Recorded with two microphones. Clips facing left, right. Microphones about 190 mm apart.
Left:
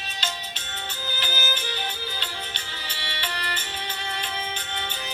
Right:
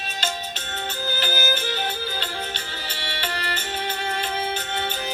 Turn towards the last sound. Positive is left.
turn(degrees=-45)  # may be behind; listen again after turning